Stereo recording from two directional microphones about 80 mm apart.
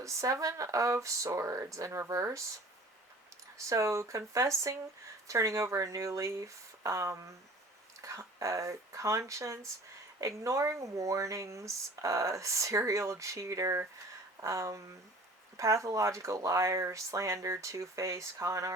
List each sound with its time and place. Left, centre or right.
0.0 s speech: right
3.7 s speech: right